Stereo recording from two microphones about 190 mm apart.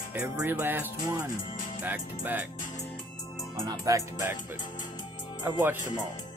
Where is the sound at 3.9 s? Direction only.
15° right (ahead or behind).